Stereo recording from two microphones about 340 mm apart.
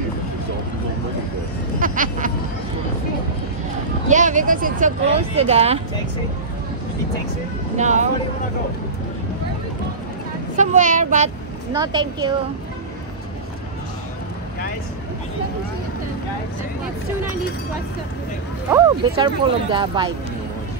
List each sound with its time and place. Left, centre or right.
1.8 s a sound: right
4.1 s speech: right
7.7 s speech: right
10.5 s speech: right
18.7 s speech: centre